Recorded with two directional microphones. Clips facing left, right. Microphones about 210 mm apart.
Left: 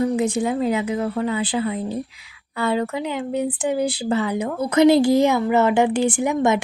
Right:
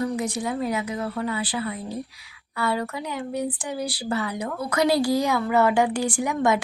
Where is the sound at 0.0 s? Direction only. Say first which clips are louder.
Left 6 dB; 25° left (ahead or behind).